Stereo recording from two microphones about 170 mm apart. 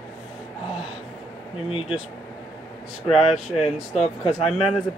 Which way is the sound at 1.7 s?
35° left (ahead or behind).